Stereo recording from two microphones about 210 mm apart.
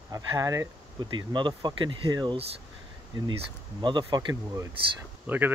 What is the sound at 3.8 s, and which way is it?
Speech, 20° right (ahead or behind).